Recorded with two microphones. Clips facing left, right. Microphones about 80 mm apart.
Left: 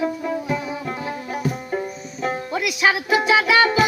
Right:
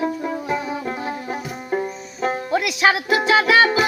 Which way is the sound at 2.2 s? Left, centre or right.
Right.